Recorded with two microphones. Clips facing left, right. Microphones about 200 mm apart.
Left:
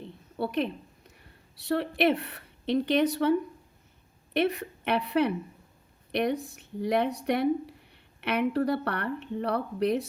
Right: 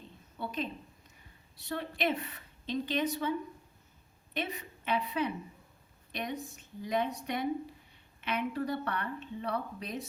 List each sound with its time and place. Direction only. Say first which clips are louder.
0.0 s a sound: left 8 dB; 65° left (ahead or behind)
1.6 s speech: left 8 dB; 70° left (ahead or behind)
4.4 s speech: left 11 dB; 65° left (ahead or behind)